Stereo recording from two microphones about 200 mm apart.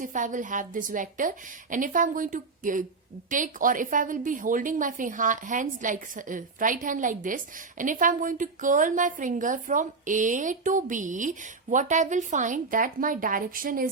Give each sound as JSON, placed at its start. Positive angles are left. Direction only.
{"t": 0.0, "sound": "a woman's voice", "side_deg": -40}